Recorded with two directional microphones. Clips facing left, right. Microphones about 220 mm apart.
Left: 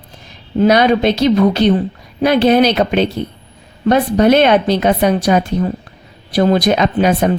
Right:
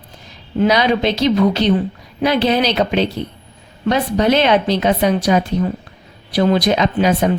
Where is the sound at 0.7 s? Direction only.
55° left (ahead or behind).